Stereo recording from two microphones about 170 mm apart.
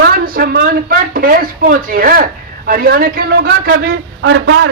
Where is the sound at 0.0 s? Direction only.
60° right (ahead or behind).